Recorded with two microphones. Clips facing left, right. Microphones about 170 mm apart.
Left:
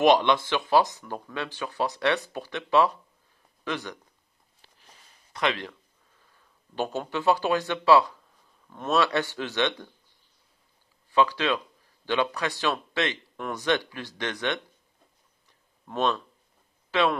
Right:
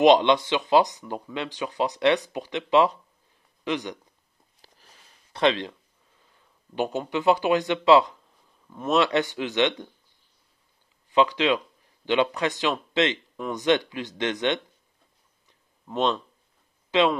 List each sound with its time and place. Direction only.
0.0 s speech: 20° right (ahead or behind)
4.6 s a sound: 40° right (ahead or behind)
5.3 s speech: 25° right (ahead or behind)
11.1 s speech: 20° right (ahead or behind)
15.9 s speech: 20° right (ahead or behind)